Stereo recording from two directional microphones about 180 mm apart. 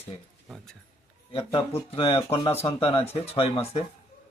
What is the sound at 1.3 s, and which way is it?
A man's voice, 30° left (ahead or behind).